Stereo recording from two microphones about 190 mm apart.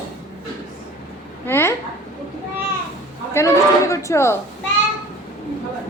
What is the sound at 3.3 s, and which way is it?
A woman's voice, 15° left (ahead or behind).